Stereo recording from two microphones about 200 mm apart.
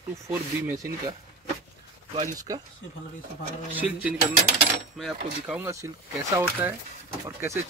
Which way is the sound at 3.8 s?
10° right (ahead or behind).